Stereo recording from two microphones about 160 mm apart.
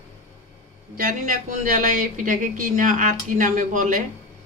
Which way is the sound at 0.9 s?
55° right (ahead or behind).